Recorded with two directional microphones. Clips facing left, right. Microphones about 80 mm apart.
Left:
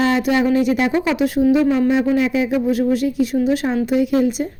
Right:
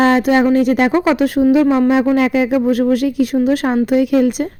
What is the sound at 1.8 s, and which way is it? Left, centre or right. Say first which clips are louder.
Speech: right 3 dB; right.